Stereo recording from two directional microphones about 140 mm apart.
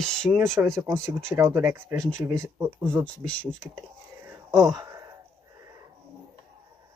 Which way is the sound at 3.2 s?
5° left (ahead or behind).